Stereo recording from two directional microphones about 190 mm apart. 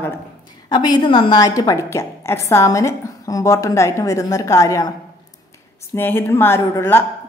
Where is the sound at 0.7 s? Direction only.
20° left (ahead or behind).